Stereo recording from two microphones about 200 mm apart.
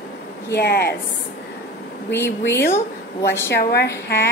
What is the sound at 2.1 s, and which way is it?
A woman's voice, 10° left (ahead or behind).